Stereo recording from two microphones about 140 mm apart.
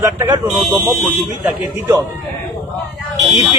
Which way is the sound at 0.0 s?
25° right (ahead or behind).